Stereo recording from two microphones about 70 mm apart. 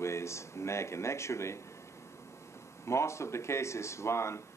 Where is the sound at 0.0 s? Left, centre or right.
Left.